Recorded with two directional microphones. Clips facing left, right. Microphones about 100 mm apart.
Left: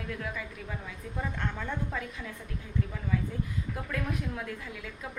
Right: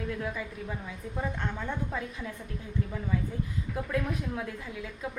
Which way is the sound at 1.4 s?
20° right (ahead or behind).